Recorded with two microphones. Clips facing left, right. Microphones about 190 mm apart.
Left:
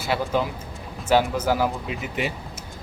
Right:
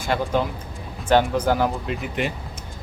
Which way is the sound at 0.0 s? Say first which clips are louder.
Right 1 dB; 5° left (ahead or behind).